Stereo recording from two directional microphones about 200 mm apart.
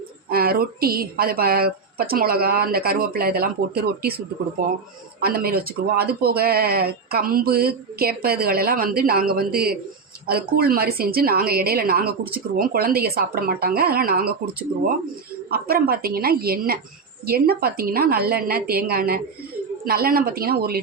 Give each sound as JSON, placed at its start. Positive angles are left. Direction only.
{"t": 0.3, "sound": "speech", "side_deg": -50}
{"t": 5.2, "sound": "speech", "side_deg": -50}
{"t": 15.4, "sound": "speech", "side_deg": -50}